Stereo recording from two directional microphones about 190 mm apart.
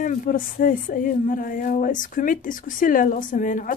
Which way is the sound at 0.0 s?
45° left (ahead or behind).